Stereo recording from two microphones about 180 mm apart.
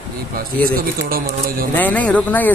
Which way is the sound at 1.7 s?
10° left (ahead or behind).